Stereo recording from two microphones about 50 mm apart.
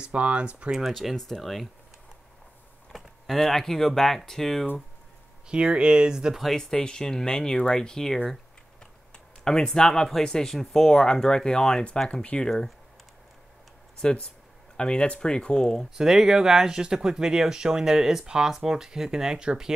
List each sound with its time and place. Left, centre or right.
0.0 s speech: right
0.7 s speech: centre
2.9 s speech: centre
5.5 s speech: centre
6.4 s speech: centre
12.4 s speech: centre
14.0 s speech: centre
15.9 s speech: centre